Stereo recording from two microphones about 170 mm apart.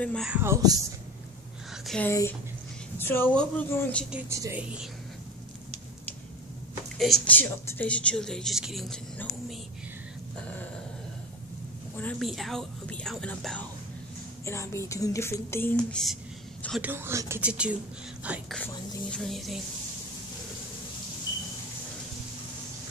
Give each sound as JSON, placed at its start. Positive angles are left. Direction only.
{"t": 0.0, "sound": "speech", "side_deg": 5}
{"t": 0.3, "sound": "speech", "side_deg": -15}
{"t": 1.9, "sound": "speech", "side_deg": 5}
{"t": 4.3, "sound": "speech", "side_deg": -15}
{"t": 7.0, "sound": "speech", "side_deg": 0}
{"t": 7.3, "sound": "speech", "side_deg": 10}
{"t": 12.0, "sound": "speech", "side_deg": 5}
{"t": 14.4, "sound": "speech", "side_deg": 15}
{"t": 16.8, "sound": "speech", "side_deg": -15}
{"t": 18.5, "sound": "speech", "side_deg": 5}